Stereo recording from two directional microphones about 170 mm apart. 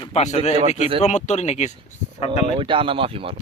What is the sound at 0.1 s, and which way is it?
Speech, 40° left (ahead or behind).